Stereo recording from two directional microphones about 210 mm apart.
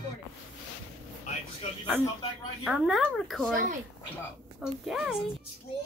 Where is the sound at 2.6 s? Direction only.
Centre (ahead or behind).